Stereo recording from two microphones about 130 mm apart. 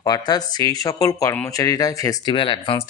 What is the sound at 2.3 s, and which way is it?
Speech, 40° left (ahead or behind).